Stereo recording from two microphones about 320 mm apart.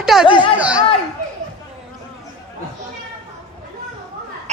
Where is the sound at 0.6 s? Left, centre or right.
Centre.